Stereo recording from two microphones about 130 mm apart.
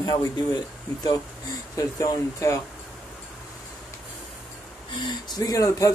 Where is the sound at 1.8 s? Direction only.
25° left (ahead or behind).